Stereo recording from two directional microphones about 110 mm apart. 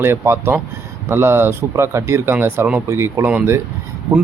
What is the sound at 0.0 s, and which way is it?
Speech, 20° right (ahead or behind).